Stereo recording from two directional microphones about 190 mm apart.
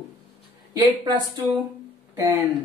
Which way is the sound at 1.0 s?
25° right (ahead or behind).